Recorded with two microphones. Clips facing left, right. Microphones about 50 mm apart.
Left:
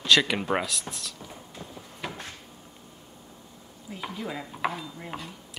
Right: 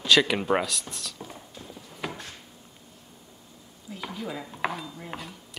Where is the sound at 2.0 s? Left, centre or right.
Centre.